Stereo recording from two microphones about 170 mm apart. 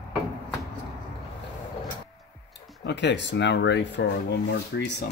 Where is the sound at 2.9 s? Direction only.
90° left.